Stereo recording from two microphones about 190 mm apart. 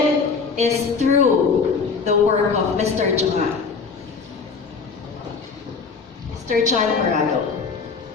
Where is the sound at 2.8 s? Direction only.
35° right (ahead or behind).